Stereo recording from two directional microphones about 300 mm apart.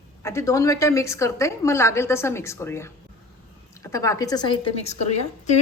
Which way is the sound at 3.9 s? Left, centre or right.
Centre.